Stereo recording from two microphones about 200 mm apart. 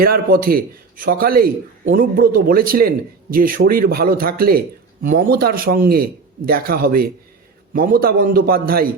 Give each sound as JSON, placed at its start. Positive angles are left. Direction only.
{"t": 0.0, "sound": "a man's voice", "side_deg": -50}